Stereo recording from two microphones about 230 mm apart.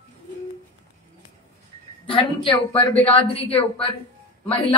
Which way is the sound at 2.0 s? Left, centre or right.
Left.